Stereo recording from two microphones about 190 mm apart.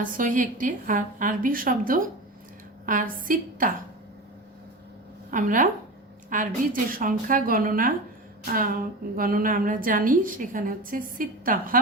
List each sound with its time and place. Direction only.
0.0 s a woman's voice: 45° right (ahead or behind)
5.3 s a woman's voice: 45° right (ahead or behind)